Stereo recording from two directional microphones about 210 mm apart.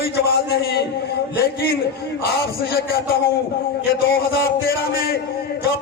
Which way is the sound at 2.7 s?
50° left (ahead or behind).